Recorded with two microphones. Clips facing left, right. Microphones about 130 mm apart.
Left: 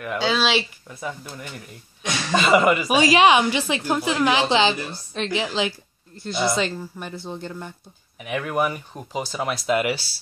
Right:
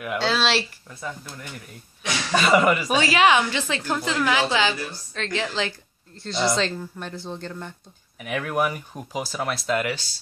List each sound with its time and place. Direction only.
0.0 s speech: centre (ahead or behind)
1.0 s a woman's voice: 15° left (ahead or behind)
2.3 s a woman's voice: centre (ahead or behind)
6.1 s speech: 5° left (ahead or behind)
9.8 s a woman's voice: 15° left (ahead or behind)